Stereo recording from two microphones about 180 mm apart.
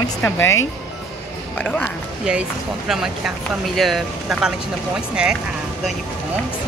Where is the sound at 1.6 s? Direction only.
10° left (ahead or behind).